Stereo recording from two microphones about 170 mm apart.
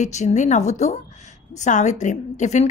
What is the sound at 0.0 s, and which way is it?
A woman's voice, 45° left (ahead or behind).